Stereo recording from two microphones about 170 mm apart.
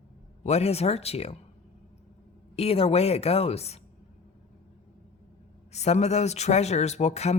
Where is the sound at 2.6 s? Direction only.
35° left (ahead or behind).